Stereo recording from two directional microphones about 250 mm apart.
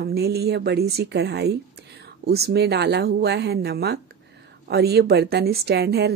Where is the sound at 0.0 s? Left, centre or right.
Right.